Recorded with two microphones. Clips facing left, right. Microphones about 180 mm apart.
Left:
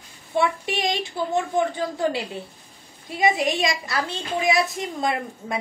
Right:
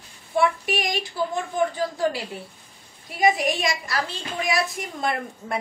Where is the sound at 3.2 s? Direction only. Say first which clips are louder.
Even; 25° left (ahead or behind).